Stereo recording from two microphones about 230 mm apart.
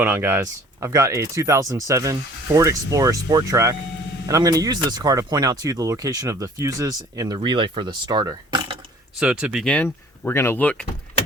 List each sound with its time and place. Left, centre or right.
0.0 s speech: centre
9.1 s speech: centre